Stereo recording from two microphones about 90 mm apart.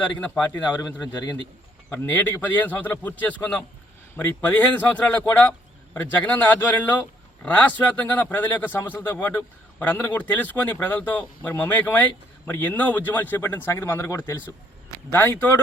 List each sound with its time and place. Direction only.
0.2 s a man's voice: 20° left (ahead or behind)
0.8 s a man's voice: 50° left (ahead or behind)
1.9 s a man's voice: 20° left (ahead or behind)